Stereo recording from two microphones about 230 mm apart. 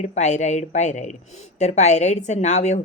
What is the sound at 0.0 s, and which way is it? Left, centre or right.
A woman's voice, left.